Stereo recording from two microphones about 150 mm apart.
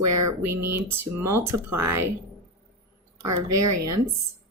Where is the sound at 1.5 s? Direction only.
15° right (ahead or behind).